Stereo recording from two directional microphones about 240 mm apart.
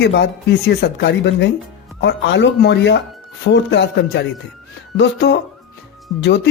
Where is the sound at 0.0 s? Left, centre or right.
Left.